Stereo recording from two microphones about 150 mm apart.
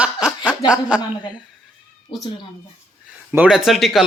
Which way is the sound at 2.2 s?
30° left (ahead or behind).